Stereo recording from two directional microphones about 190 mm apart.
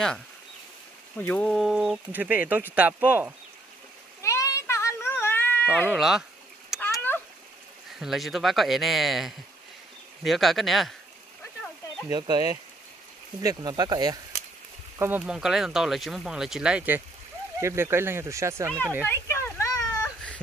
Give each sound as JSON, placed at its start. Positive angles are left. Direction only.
{"t": 1.1, "sound": "speech", "side_deg": 10}
{"t": 4.2, "sound": "cat", "side_deg": 15}
{"t": 6.8, "sound": "a sound", "side_deg": 10}
{"t": 8.0, "sound": "speech", "side_deg": 0}
{"t": 12.1, "sound": "speech", "side_deg": -20}
{"t": 15.0, "sound": "speech", "side_deg": -10}
{"t": 19.0, "sound": "a sound", "side_deg": 15}